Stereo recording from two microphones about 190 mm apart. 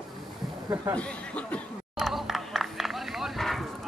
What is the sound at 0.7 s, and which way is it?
Speech, 15° right (ahead or behind).